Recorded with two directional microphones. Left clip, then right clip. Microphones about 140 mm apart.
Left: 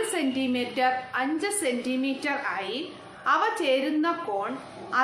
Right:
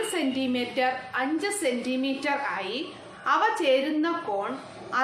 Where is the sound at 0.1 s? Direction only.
20° left (ahead or behind).